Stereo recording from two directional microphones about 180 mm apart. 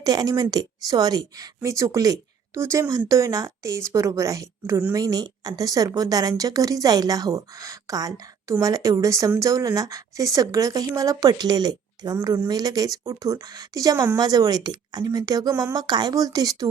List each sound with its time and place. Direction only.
0.0 s a woman's voice: 20° right (ahead or behind)